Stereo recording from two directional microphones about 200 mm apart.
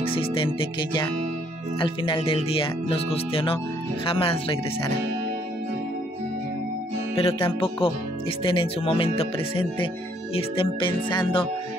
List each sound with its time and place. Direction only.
0.1 s speech: 25° left (ahead or behind)
7.2 s speech: 30° left (ahead or behind)